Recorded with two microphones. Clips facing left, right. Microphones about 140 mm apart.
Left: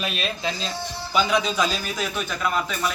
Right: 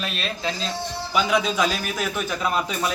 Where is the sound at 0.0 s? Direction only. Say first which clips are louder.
Left 1 dB; 5° left (ahead or behind).